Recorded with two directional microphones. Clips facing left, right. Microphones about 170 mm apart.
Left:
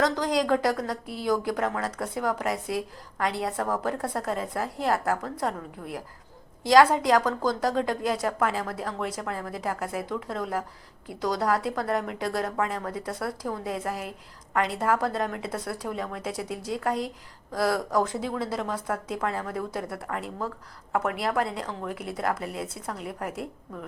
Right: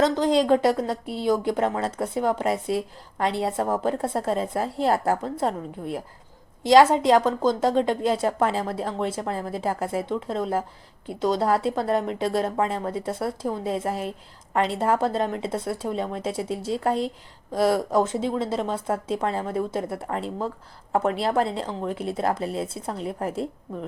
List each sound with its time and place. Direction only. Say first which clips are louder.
0.0 s a woman's voice: right 4 dB; 25° right (ahead or behind)